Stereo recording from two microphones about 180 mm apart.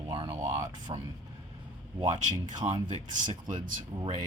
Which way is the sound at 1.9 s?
25° right (ahead or behind).